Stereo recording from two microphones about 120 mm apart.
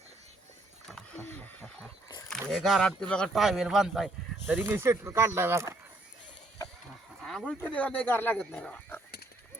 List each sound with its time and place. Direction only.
0.9 s a sound: 5° left (ahead or behind)
1.2 s wild animals: 15° left (ahead or behind)
2.5 s speech: 5° left (ahead or behind)
3.4 s speech: 5° right (ahead or behind)
4.6 s speech: 20° right (ahead or behind)
7.2 s speech: 5° left (ahead or behind)